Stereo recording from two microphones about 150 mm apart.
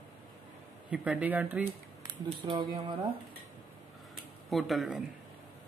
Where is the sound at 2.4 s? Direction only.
35° right (ahead or behind).